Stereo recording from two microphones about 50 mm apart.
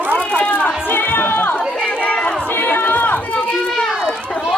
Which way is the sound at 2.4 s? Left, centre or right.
Left.